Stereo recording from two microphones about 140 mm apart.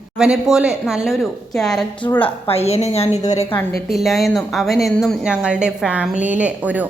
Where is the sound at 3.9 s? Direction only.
Centre (ahead or behind).